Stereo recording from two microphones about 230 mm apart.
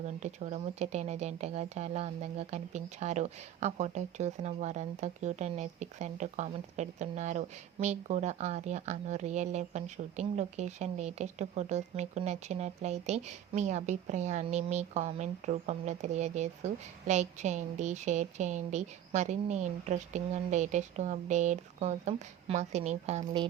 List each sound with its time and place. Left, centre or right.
0.0 s speech: right